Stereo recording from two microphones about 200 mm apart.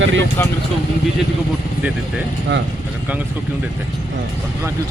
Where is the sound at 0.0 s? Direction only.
70° right (ahead or behind).